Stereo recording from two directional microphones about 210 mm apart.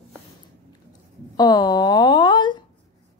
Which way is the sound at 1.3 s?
20° left (ahead or behind).